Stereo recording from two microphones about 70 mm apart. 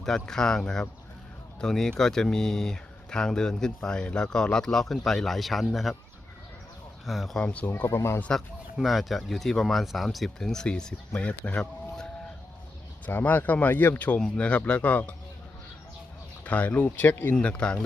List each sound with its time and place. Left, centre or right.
0.0 s speech: centre
7.0 s speech: centre
7.3 s speech: centre
7.9 s speech: left
8.8 s speech: centre
11.4 s a sound: centre
13.1 s speech: left
16.4 s speech: left
17.3 s speech: centre